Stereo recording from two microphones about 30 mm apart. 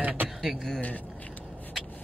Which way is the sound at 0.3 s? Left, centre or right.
Centre.